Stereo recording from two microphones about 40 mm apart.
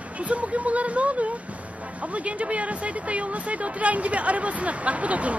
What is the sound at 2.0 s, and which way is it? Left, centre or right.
Speech, right.